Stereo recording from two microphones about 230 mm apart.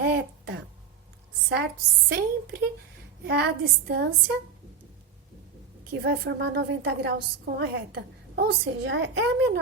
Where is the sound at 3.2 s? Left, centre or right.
Right.